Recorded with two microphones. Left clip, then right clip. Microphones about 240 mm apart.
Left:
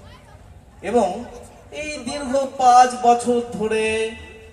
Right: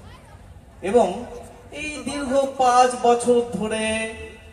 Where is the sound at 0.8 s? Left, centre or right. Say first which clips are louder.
Right 1 dB; left.